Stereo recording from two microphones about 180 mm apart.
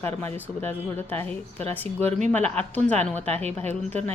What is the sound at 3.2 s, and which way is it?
Speech, 35° right (ahead or behind).